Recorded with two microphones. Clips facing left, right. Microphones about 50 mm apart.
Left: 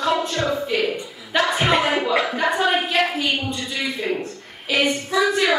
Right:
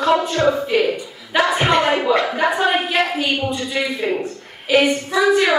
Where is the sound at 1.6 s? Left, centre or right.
Centre.